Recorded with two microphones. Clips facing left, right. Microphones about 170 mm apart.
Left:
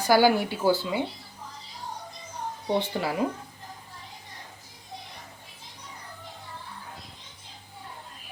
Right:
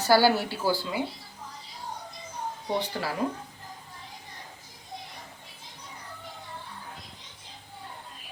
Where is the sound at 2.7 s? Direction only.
20° left (ahead or behind).